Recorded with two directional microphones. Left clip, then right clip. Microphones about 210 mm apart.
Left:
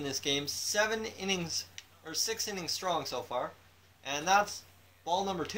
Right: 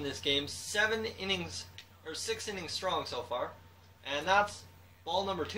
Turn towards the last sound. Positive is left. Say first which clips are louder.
# left 1 dB
turn(degrees=50)  # may be behind; listen again after turning